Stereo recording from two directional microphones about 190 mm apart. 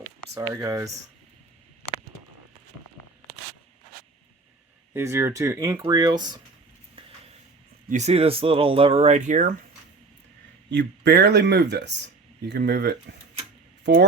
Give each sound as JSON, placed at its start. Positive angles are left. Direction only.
{"t": 0.3, "sound": "speech", "side_deg": -20}
{"t": 4.9, "sound": "speech", "side_deg": -15}
{"t": 7.9, "sound": "speech", "side_deg": -35}
{"t": 10.7, "sound": "speech", "side_deg": -65}